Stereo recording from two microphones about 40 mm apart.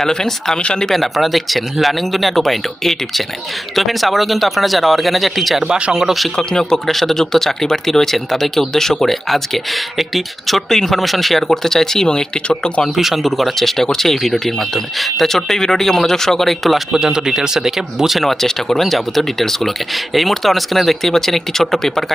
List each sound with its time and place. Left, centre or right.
0.0 s speech: centre
0.9 s speech: centre
5.6 s speech: right
5.9 s speech: centre
6.3 s speech: centre
6.8 s speech: centre
12.0 s speech: left
13.0 s speech: centre
16.9 s speech: centre
18.2 s speech: centre